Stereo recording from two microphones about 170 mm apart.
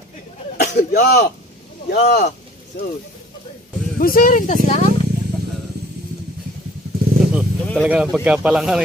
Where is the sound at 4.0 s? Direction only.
60° left (ahead or behind).